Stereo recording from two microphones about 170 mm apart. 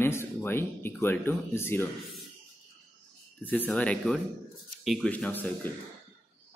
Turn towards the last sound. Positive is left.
turn(degrees=10)  # may be behind; listen again after turning